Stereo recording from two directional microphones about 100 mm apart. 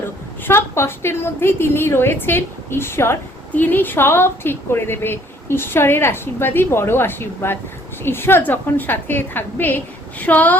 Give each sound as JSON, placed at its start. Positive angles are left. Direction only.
{"t": 0.4, "sound": "a woman's voice", "side_deg": 25}